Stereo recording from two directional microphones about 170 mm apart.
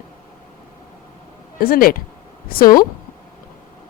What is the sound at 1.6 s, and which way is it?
Speech, 60° left (ahead or behind).